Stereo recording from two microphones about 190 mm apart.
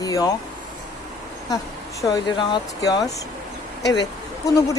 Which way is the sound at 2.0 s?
20° left (ahead or behind).